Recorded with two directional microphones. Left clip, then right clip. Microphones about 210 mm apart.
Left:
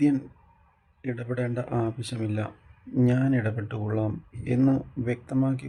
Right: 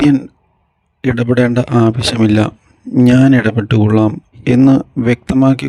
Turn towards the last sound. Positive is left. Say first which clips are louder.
# right 16 dB
turn(degrees=-50)  # may be behind; listen again after turning